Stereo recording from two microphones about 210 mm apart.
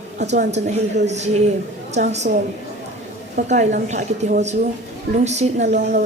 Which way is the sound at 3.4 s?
40° right (ahead or behind).